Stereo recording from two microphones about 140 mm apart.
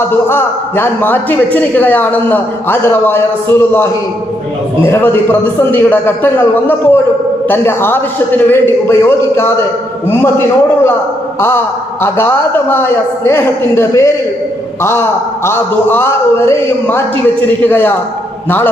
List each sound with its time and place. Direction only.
0.1 s a man's voice: 15° left (ahead or behind)
11.3 s a man's voice: 15° left (ahead or behind)
15.4 s a man's voice: 15° left (ahead or behind)